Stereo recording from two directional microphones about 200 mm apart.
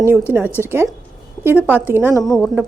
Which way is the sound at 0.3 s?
10° right (ahead or behind).